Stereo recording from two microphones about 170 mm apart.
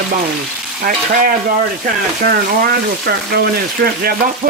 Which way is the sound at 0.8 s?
55° right (ahead or behind).